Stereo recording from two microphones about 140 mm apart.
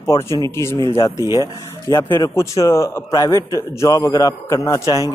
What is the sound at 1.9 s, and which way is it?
Speech, 20° left (ahead or behind).